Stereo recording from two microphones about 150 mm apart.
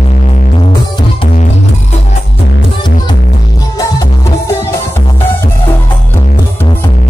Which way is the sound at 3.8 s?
20° left (ahead or behind).